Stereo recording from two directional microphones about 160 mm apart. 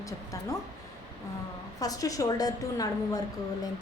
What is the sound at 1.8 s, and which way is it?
A woman's voice, 20° left (ahead or behind).